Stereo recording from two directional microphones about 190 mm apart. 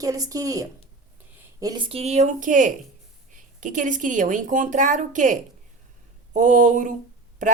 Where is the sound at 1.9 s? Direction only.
35° right (ahead or behind).